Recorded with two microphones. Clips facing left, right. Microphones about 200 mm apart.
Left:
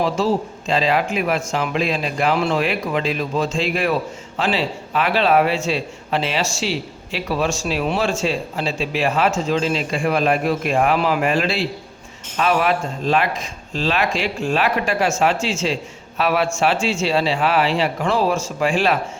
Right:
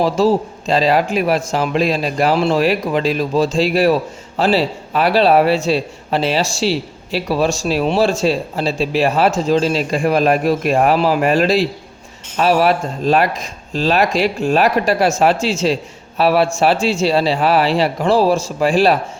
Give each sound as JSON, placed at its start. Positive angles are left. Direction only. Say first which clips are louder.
{"t": 0.7, "sound": "a man's voice", "louder": "right 4 dB", "side_deg": -40}